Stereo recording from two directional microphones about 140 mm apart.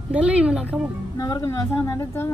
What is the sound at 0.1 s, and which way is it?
Speech, 10° right (ahead or behind).